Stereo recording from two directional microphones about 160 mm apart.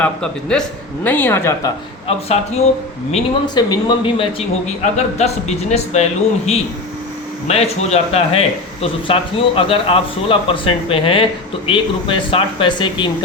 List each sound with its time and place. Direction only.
0.0 s a man's voice: 5° left (ahead or behind)
2.0 s speech: 40° left (ahead or behind)
3.4 s speech: 25° left (ahead or behind)
4.9 s a man's voice: 45° left (ahead or behind)